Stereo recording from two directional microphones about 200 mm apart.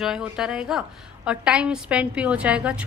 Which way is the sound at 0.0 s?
Centre (ahead or behind).